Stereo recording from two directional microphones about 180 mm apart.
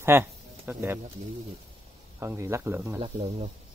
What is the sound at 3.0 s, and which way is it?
Speech, 35° right (ahead or behind).